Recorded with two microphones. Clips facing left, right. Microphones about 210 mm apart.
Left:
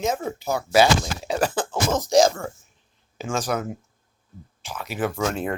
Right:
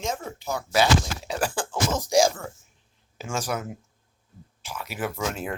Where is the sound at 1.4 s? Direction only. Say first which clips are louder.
Left 4 dB; 10° right (ahead or behind).